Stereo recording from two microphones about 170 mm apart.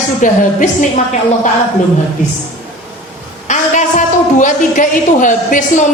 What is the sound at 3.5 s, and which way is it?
A woman's voice, 45° left (ahead or behind).